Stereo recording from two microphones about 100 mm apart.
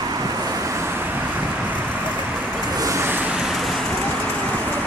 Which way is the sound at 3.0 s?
20° right (ahead or behind).